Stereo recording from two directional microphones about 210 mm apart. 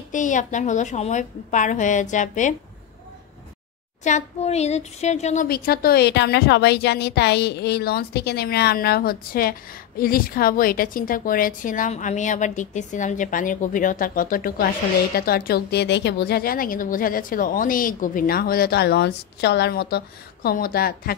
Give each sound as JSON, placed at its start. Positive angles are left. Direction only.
{"t": 0.1, "sound": "a woman's voice", "side_deg": 35}
{"t": 4.0, "sound": "a woman's voice", "side_deg": 35}